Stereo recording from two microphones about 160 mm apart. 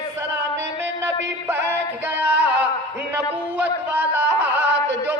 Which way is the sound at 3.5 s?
10° right (ahead or behind).